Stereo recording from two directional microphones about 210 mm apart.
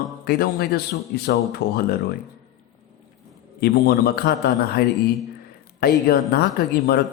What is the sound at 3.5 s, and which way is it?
A man's voice, 50° left (ahead or behind).